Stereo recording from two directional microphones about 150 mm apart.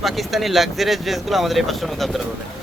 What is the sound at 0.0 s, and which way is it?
Speech, centre (ahead or behind).